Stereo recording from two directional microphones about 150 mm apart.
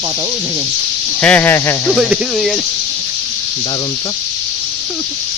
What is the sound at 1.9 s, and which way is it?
Speech, 5° right (ahead or behind).